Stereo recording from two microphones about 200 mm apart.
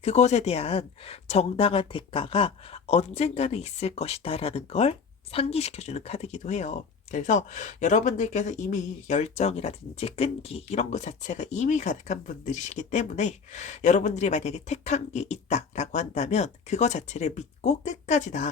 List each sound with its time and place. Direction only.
0.0 s a woman's voice: 35° left (ahead or behind)